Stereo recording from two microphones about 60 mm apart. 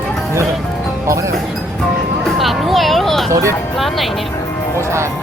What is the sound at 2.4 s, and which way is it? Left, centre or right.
Music, centre.